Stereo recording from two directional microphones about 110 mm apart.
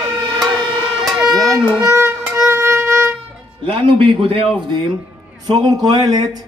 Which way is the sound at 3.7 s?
55° right (ahead or behind).